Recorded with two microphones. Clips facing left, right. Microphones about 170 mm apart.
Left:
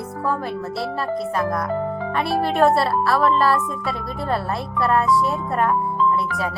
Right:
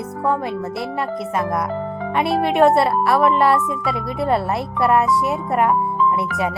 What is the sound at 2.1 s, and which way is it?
Speech, 20° right (ahead or behind).